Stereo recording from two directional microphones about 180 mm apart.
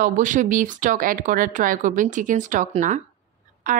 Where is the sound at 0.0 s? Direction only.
45° right (ahead or behind).